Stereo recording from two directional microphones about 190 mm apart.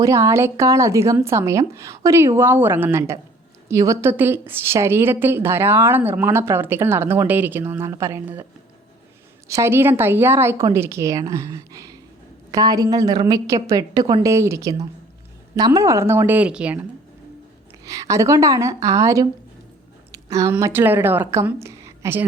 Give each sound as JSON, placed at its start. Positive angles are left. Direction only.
{"t": 0.0, "sound": "a woman's voice", "side_deg": -15}
{"t": 9.5, "sound": "a woman's voice", "side_deg": -15}
{"t": 17.8, "sound": "a woman's voice", "side_deg": -15}